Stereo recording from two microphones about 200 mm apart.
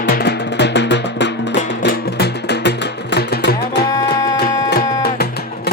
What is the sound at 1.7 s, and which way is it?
Music, 50° left (ahead or behind).